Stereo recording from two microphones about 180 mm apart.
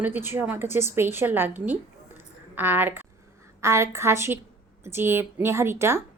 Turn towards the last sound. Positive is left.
turn(degrees=-15)  # may be behind; listen again after turning